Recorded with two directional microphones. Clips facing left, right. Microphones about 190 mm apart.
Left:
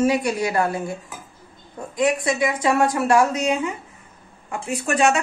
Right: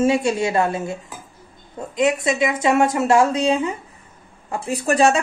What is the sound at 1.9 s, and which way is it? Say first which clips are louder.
Speech: right 2 dB; 20° right (ahead or behind).